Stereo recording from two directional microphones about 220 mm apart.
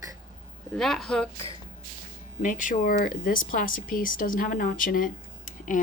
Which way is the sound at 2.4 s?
35° left (ahead or behind).